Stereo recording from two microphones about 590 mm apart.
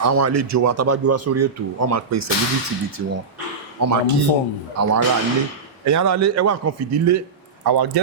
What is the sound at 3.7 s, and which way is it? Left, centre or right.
Speech, right.